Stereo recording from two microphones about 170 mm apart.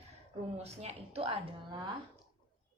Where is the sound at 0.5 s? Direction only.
40° right (ahead or behind).